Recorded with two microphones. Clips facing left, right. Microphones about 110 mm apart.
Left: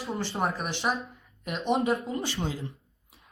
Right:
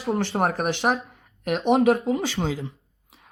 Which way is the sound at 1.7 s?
80° right.